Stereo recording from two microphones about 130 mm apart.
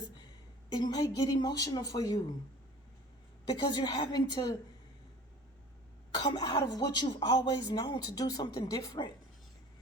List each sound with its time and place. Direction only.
0.7 s speech: 30° left (ahead or behind)
3.4 s speech: 35° left (ahead or behind)
6.3 s speech: 30° left (ahead or behind)